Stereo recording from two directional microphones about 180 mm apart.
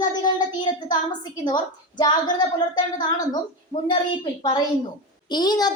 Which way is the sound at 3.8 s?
30° left (ahead or behind).